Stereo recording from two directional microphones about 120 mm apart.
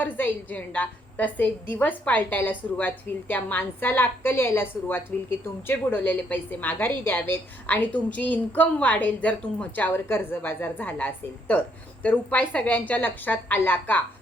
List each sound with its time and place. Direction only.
0.0 s a woman's voice: 15° left (ahead or behind)